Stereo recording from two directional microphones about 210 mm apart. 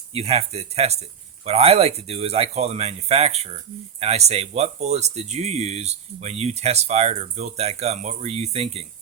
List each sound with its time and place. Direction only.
0.1 s speech: 30° right (ahead or behind)